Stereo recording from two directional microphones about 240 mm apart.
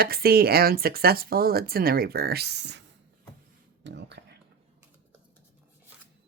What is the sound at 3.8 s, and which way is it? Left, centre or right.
Whispering, right.